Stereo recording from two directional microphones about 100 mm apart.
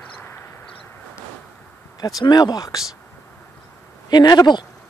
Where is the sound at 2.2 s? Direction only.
40° left (ahead or behind).